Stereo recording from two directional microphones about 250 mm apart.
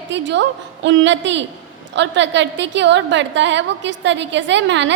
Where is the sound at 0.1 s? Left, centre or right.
Right.